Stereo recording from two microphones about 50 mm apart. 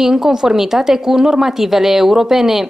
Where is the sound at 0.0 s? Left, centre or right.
Centre.